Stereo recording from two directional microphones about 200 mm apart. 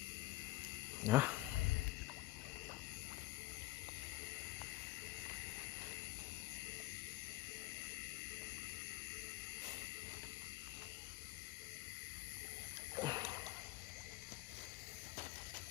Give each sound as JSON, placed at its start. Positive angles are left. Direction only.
{"t": 1.0, "sound": "speech", "side_deg": -10}
{"t": 13.0, "sound": "splash", "side_deg": -20}